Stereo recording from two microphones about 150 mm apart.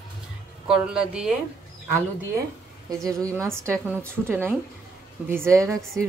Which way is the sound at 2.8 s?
20° right (ahead or behind).